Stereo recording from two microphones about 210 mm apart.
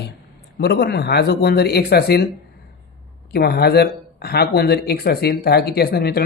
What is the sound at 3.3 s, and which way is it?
Speech, 50° left (ahead or behind).